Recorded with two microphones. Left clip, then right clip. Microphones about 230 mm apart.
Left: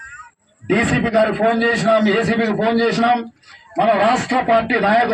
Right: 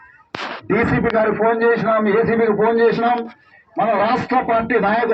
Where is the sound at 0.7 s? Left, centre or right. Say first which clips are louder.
Left 1 dB; left.